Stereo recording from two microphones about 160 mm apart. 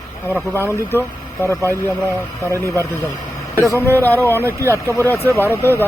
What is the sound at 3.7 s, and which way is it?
Speech, 15° left (ahead or behind).